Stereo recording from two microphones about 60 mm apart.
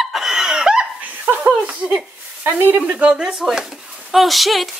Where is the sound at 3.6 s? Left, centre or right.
Centre.